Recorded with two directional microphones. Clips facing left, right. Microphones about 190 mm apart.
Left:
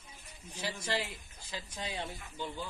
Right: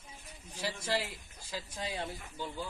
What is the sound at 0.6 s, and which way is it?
Speech, 5° right (ahead or behind).